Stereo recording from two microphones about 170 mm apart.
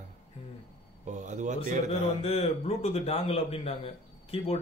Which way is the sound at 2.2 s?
35° left (ahead or behind).